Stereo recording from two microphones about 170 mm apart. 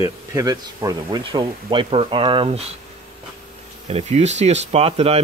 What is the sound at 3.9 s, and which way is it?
Speech, 40° right (ahead or behind).